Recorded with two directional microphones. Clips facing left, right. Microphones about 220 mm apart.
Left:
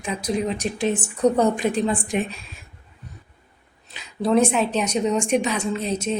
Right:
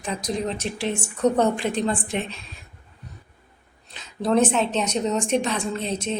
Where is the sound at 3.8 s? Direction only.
5° left (ahead or behind).